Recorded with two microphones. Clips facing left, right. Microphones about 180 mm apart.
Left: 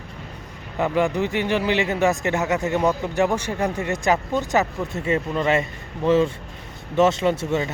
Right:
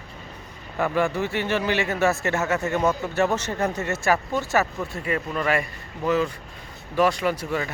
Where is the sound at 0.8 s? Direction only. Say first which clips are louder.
Left 2 dB; 20° left (ahead or behind).